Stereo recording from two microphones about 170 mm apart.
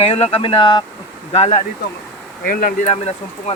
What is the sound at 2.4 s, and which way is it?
Speech, 55° left (ahead or behind).